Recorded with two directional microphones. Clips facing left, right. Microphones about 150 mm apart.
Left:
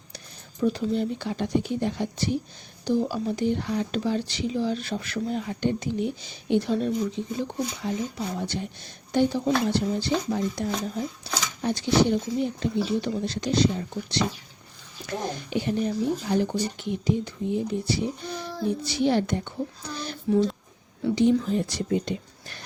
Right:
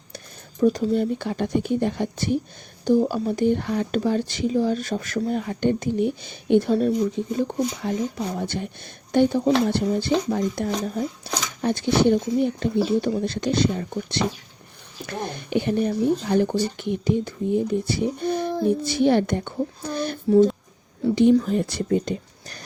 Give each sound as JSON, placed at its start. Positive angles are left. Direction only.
{"t": 0.6, "sound": "speech", "side_deg": -45}
{"t": 9.1, "sound": "speech", "side_deg": -55}
{"t": 21.2, "sound": "speech", "side_deg": -60}